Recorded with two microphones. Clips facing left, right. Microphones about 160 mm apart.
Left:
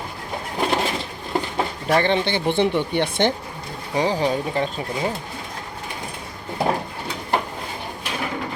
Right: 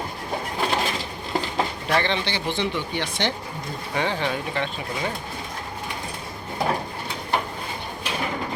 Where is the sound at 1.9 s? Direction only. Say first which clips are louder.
Left 7 dB; 45° left (ahead or behind).